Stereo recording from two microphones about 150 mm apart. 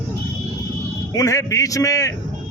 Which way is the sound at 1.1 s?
20° left (ahead or behind).